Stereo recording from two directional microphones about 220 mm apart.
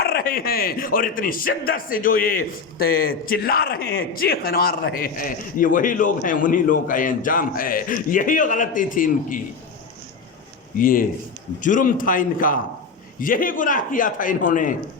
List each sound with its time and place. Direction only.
0.0 s a man's voice: 45° left (ahead or behind)
10.8 s a man's voice: 40° left (ahead or behind)